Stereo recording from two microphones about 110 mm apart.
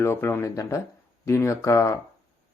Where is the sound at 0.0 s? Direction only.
20° left (ahead or behind).